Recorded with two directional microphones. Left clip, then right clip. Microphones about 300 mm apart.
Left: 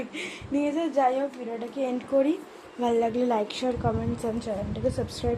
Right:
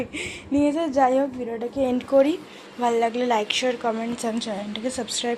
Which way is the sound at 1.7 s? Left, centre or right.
Right.